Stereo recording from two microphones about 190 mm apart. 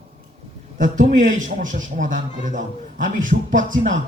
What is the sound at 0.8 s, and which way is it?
Speech, 40° right (ahead or behind).